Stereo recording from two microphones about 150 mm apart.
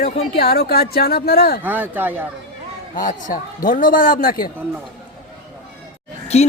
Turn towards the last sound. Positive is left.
turn(degrees=45)  # may be behind; listen again after turning